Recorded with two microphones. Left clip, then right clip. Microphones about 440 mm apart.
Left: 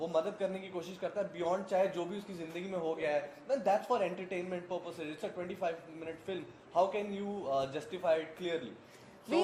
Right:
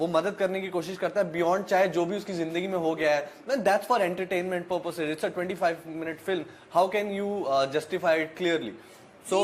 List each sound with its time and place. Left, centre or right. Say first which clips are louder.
0.0 s a man's voice: right 8 dB; right